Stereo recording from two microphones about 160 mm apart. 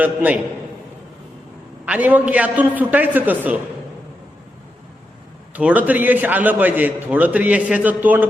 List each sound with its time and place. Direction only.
0.0 s a man's voice: 10° right (ahead or behind)
1.8 s a man's voice: 10° right (ahead or behind)
5.5 s a man's voice: 10° right (ahead or behind)